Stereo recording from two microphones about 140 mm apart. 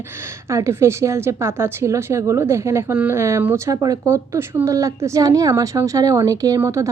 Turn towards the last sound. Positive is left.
turn(degrees=-20)  # may be behind; listen again after turning